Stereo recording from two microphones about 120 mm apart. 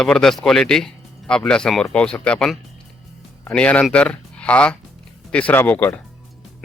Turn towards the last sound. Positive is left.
turn(degrees=15)  # may be behind; listen again after turning